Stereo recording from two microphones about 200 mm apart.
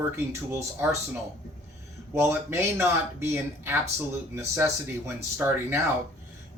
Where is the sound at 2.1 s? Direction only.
10° right (ahead or behind).